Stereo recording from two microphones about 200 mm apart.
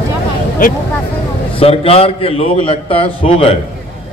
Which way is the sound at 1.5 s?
30° left (ahead or behind).